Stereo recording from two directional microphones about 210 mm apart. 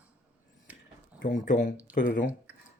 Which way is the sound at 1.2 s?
40° left (ahead or behind).